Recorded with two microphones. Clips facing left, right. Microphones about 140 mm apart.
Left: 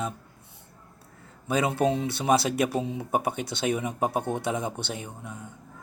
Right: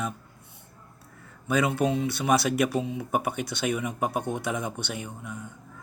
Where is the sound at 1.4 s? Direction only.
30° left (ahead or behind).